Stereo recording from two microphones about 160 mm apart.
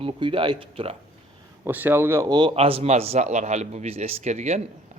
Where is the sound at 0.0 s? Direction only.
35° right (ahead or behind).